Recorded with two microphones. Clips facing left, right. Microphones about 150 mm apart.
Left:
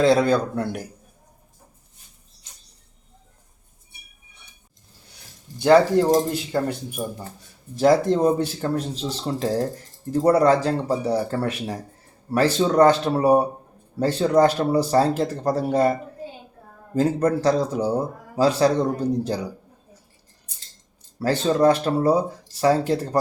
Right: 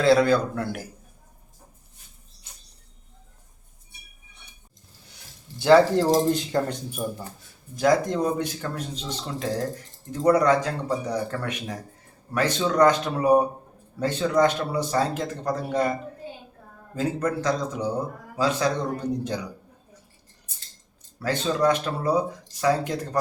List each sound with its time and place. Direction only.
0.0 s speech: 20° left (ahead or behind)
5.5 s speech: 20° left (ahead or behind)
6.3 s speech: 10° left (ahead or behind)
7.3 s speech: 30° left (ahead or behind)
21.2 s speech: 35° left (ahead or behind)